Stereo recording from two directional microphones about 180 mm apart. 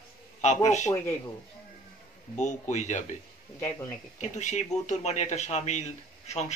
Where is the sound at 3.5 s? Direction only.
15° left (ahead or behind).